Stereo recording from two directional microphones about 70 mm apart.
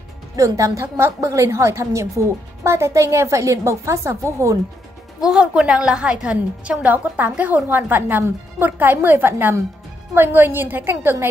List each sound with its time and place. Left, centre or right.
0.4 s a woman's voice: right
5.2 s a woman's voice: centre; by 11.2 s right